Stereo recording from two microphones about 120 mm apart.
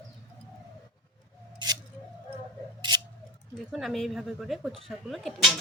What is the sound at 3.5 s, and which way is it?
Speech, centre (ahead or behind).